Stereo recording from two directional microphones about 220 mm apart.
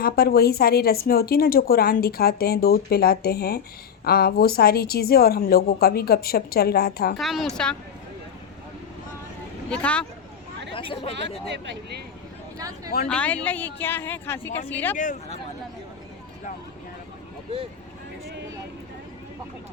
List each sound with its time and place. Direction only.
0.0 s speech: 45° left (ahead or behind)
7.2 s a woman's voice: centre (ahead or behind)
9.6 s a woman's voice: 5° left (ahead or behind)
10.8 s speech: 25° left (ahead or behind)
11.5 s speech: 50° right (ahead or behind)
12.5 s a sound: 15° right (ahead or behind)
13.1 s speech: 5° left (ahead or behind)
14.9 s speech: 35° left (ahead or behind)